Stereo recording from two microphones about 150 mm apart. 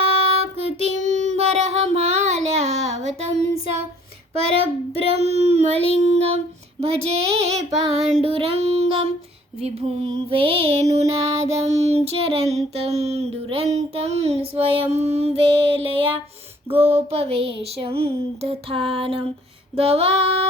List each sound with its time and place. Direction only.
0.0 s child singing: 45° right (ahead or behind)
4.9 s child singing: 45° right (ahead or behind)
6.8 s a sound: 40° right (ahead or behind)
10.9 s child singing: 50° right (ahead or behind)
16.7 s a sound: 40° right (ahead or behind)
19.7 s child singing: 40° right (ahead or behind)